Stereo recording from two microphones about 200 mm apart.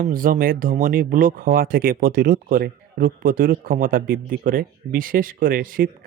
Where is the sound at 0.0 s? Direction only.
45° right (ahead or behind).